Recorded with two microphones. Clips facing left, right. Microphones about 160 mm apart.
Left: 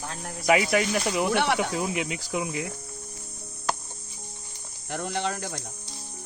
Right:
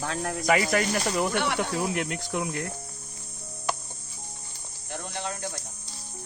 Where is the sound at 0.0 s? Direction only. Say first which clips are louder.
Right 6 dB; 80° right.